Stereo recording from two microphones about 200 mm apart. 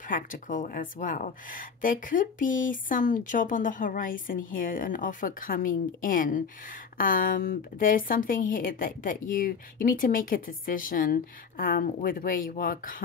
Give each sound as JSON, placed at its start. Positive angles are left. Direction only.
{"t": 0.0, "sound": "speech", "side_deg": 40}